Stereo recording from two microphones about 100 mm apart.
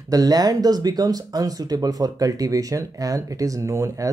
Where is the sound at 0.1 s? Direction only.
40° right (ahead or behind).